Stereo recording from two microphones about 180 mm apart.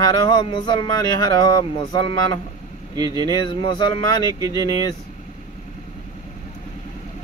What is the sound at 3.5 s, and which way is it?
Speech, 25° left (ahead or behind).